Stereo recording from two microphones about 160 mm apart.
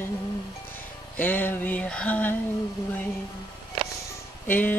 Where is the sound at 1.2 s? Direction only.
10° left (ahead or behind).